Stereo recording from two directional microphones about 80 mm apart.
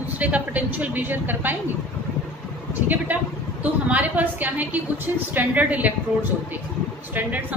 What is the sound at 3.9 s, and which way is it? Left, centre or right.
A woman's voice, right.